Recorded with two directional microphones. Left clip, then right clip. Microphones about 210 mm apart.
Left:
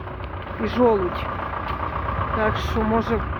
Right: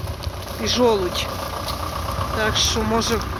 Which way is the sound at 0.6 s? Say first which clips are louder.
Right 1 dB; 15° left (ahead or behind).